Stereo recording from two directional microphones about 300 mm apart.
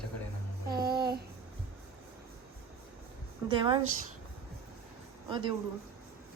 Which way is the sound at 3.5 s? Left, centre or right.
Centre.